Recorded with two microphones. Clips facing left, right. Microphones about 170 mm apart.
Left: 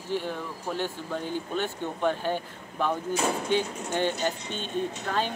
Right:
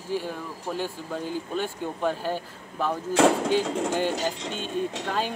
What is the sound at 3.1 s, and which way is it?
Speech, 90° right.